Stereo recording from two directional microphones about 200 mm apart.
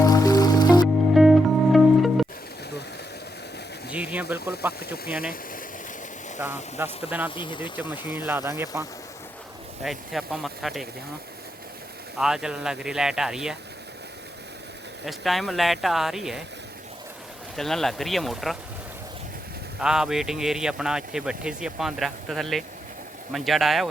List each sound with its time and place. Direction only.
0.0 s music: 20° left (ahead or behind)
1.1 s music: centre (ahead or behind)
3.9 s a sound: 5° right (ahead or behind)
6.4 s speech: 10° right (ahead or behind)
7.3 s speech: 25° left (ahead or behind)
7.8 s speech: 10° right (ahead or behind)
9.8 s speech: centre (ahead or behind)
12.1 s speech: 5° right (ahead or behind)
15.0 s speech: centre (ahead or behind)
17.6 s speech: centre (ahead or behind)
19.8 s speech: 5° right (ahead or behind)